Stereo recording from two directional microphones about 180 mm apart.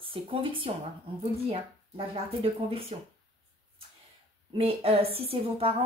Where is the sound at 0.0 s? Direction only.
30° right (ahead or behind).